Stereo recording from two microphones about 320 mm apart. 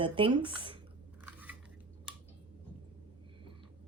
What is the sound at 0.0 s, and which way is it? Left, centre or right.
Speech, centre.